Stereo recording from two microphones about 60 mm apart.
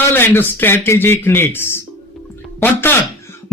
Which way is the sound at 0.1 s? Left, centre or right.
Left.